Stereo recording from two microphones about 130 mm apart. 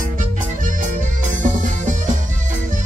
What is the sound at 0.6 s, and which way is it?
Music, 85° right.